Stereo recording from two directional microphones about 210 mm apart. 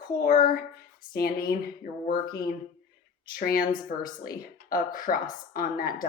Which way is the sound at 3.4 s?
45° left (ahead or behind).